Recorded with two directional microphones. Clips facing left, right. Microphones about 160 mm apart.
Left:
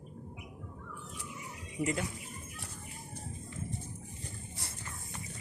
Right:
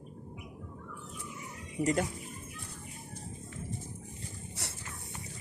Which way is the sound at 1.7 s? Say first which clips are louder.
Right 4 dB; 40° right (ahead or behind).